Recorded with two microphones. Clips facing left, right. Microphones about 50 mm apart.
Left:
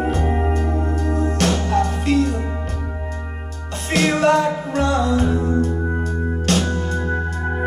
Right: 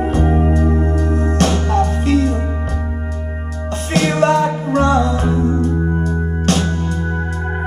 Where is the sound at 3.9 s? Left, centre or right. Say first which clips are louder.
Right 2 dB; right.